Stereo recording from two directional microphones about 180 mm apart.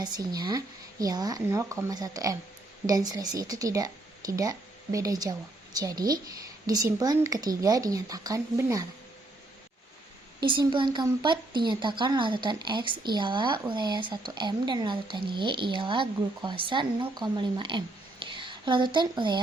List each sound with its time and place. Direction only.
0.0 s speech: 20° right (ahead or behind)
10.4 s speech: 25° right (ahead or behind)